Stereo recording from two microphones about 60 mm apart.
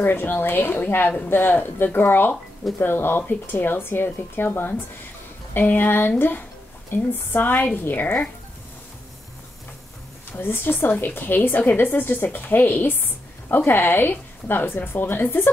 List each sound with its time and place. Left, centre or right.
0.0 s a woman's voice: left
10.3 s a woman's voice: left